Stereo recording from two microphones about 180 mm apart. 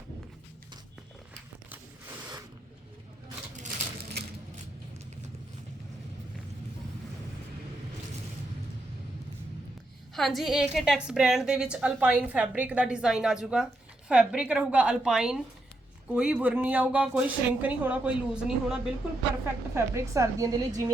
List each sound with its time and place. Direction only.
10.2 s a woman's voice: centre (ahead or behind)
19.7 s a woman's voice: 15° right (ahead or behind)